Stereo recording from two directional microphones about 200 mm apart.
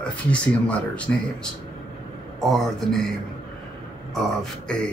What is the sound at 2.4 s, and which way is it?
Speech, centre (ahead or behind).